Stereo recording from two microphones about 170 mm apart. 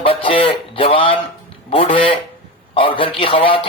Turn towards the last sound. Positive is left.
turn(degrees=30)  # may be behind; listen again after turning